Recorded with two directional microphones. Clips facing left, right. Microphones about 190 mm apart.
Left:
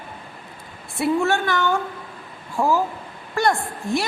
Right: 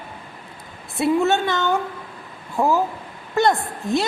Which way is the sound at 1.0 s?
20° right (ahead or behind).